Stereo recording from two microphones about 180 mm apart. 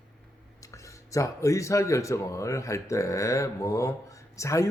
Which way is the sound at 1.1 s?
15° left (ahead or behind).